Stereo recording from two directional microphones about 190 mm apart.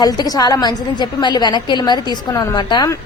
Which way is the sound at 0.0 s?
20° left (ahead or behind).